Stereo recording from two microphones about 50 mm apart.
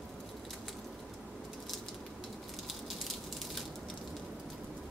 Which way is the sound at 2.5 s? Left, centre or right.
Centre.